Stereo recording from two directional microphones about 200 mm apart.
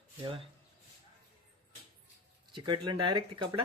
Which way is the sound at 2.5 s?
25° right (ahead or behind).